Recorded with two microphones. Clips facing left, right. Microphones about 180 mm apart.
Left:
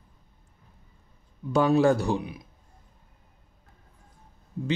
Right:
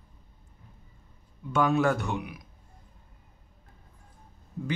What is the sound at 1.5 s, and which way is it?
Speech, 35° left (ahead or behind).